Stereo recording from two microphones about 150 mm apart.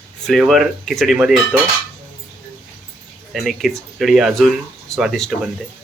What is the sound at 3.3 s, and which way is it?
Speech, centre (ahead or behind).